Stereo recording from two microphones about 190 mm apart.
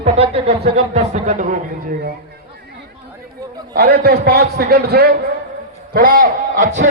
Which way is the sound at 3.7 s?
55° right (ahead or behind).